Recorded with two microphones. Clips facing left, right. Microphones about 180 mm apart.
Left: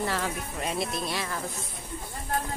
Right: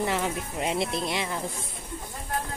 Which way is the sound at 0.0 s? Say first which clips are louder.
Right 2 dB; 20° right (ahead or behind).